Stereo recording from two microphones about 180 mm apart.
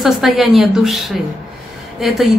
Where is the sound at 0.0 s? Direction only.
Centre (ahead or behind).